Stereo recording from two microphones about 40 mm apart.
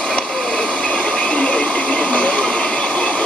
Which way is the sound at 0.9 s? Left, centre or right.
Left.